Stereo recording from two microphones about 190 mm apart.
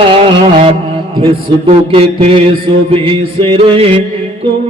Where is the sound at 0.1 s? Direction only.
30° right (ahead or behind).